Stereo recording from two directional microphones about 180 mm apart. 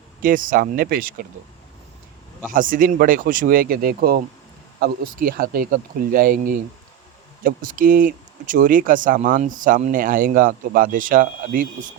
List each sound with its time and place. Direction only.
0.2 s speech: 50° right (ahead or behind)
2.5 s speech: 50° right (ahead or behind)